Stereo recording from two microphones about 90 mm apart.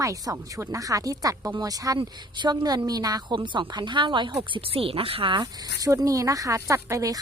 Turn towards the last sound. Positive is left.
turn(degrees=-40)  # may be behind; listen again after turning